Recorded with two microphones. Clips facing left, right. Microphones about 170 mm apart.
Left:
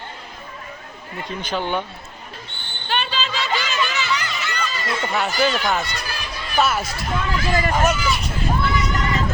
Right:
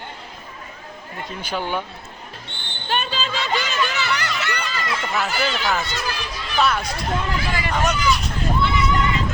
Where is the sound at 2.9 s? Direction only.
45° right (ahead or behind).